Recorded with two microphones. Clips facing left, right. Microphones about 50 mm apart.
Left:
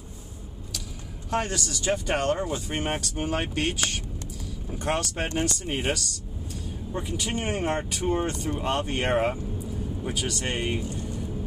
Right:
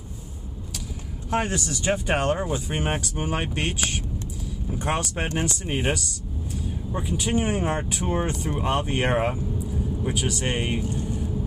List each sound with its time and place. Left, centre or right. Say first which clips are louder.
1.3 s speech: right 2 dB; centre
4.6 s speech: right 1 dB; centre